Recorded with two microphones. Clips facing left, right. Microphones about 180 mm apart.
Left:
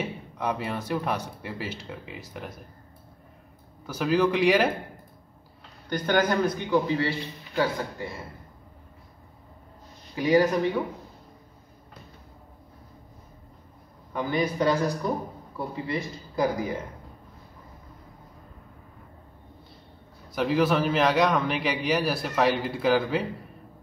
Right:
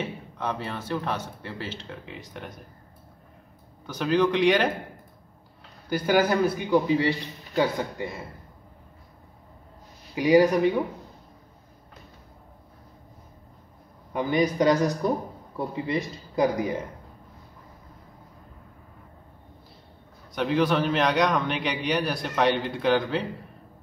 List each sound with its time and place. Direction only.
0.0 s speech: 10° left (ahead or behind)
3.8 s a man's voice: 5° left (ahead or behind)
5.9 s a man's voice: 5° right (ahead or behind)
10.1 s a man's voice: 15° right (ahead or behind)
14.1 s a man's voice: 15° right (ahead or behind)
20.3 s a man's voice: 5° left (ahead or behind)